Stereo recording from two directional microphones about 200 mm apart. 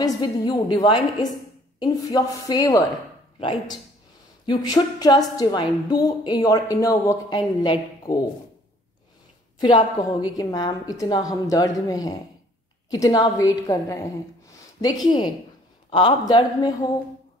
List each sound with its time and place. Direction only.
0.0 s a woman's voice: 20° left (ahead or behind)
9.6 s a woman's voice: 20° left (ahead or behind)